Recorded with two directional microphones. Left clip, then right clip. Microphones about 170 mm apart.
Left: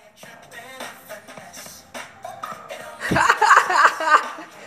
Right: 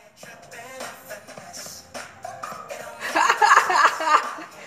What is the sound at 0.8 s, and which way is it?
Music, 15° left (ahead or behind).